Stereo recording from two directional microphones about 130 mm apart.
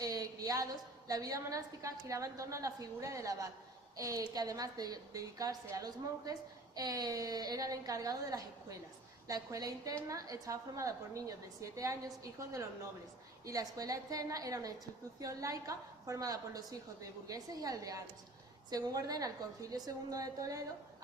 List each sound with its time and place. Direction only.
0.0 s a woman's voice: 25° right (ahead or behind)